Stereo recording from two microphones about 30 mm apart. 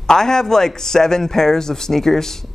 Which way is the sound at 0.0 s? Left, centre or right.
Centre.